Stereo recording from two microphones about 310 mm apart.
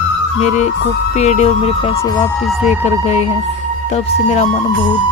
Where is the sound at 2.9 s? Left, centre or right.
Left.